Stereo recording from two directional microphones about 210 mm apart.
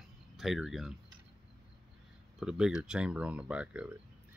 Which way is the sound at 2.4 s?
5° right (ahead or behind).